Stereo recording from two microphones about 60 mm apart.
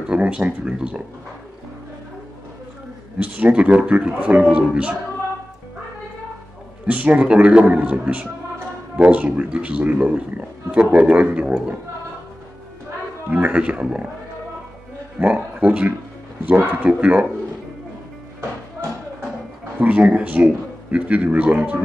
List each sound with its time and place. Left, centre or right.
0.1 s speech: centre
3.2 s speech: right
6.9 s speech: right
13.3 s speech: right
15.1 s speech: right
19.8 s speech: right